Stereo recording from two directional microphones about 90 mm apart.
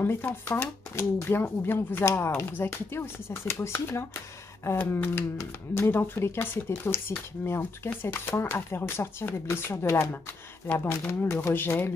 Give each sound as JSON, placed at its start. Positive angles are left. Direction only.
{"t": 0.0, "sound": "speech", "side_deg": 25}